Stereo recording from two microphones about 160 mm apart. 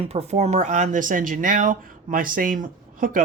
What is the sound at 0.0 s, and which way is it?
Speech, 40° right (ahead or behind).